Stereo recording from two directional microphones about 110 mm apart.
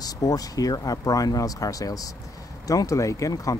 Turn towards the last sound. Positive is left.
turn(degrees=30)  # may be behind; listen again after turning